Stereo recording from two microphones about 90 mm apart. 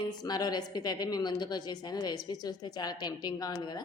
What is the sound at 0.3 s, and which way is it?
A woman's voice, 50° left (ahead or behind).